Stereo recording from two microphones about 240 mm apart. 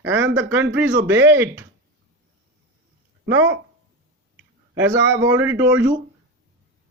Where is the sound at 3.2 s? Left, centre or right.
Right.